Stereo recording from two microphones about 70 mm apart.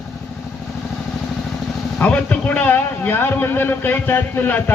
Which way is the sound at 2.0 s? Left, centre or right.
Centre.